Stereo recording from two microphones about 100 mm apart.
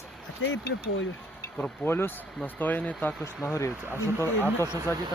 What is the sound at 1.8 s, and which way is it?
Speech, 25° left (ahead or behind).